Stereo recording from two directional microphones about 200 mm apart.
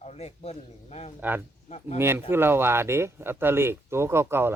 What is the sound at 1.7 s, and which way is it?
Speech, 30° left (ahead or behind).